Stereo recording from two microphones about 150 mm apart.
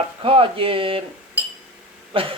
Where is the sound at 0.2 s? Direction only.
35° right (ahead or behind).